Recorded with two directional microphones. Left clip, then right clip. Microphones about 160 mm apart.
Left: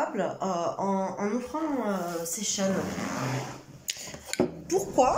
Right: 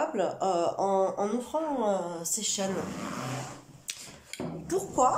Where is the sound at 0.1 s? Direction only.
15° right (ahead or behind).